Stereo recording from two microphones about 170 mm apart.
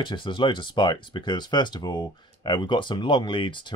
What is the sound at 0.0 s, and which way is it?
Speech, 30° left (ahead or behind).